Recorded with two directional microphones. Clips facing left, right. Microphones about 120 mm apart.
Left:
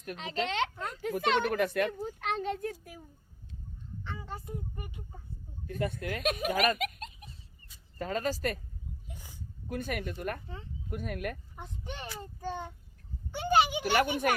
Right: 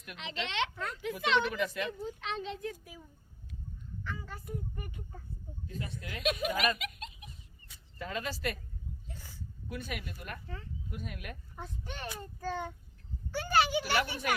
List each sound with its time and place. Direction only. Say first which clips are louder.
0.0 s speech: left 6 dB; 40° left (ahead or behind)
4.0 s a child's voice: left 2 dB; 25° left (ahead or behind)
5.6 s speech: left 9 dB; 55° left (ahead or behind)
9.0 s a sound: even; 15° left (ahead or behind)
9.6 s speech: left 6 dB; 50° left (ahead or behind)
11.5 s a child's voice: left 1 dB; 20° left (ahead or behind)